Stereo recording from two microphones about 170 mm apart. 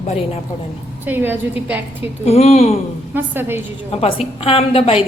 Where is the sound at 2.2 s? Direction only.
40° left (ahead or behind).